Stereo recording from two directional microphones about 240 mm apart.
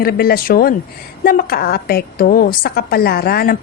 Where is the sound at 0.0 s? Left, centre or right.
Left.